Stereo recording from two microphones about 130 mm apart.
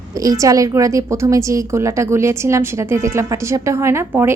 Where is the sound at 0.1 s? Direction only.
25° right (ahead or behind).